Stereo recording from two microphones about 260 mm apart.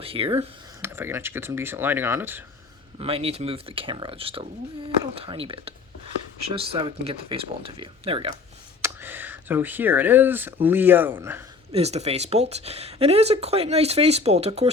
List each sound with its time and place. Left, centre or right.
0.0 s speech: right
0.8 s speech: centre
3.0 s speech: right
8.8 s speech: centre
11.7 s speech: right